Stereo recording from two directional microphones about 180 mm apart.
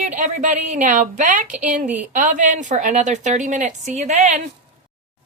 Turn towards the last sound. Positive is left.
turn(degrees=-40)  # may be behind; listen again after turning